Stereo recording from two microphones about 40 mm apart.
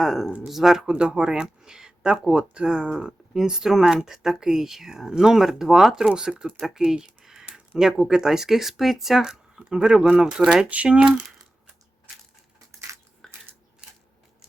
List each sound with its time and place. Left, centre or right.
0.0 s speech: centre
0.9 s speech: right
10.7 s speech: right
13.2 s crushing: centre